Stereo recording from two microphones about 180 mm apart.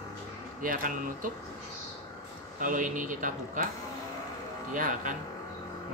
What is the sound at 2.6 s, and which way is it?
A woman's voice, 45° right (ahead or behind).